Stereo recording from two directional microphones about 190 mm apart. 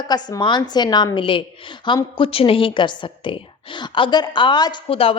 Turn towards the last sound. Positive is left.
turn(degrees=30)  # may be behind; listen again after turning